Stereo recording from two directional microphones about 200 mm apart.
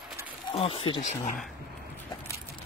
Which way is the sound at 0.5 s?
25° left (ahead or behind).